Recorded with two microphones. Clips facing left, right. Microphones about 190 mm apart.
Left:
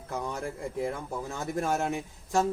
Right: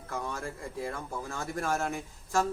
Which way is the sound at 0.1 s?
20° left (ahead or behind).